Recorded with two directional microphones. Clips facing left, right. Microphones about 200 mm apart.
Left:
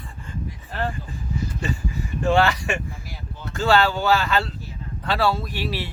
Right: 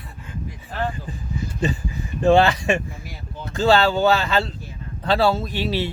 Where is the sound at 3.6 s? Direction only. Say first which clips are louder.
Right 3 dB; 25° right (ahead or behind).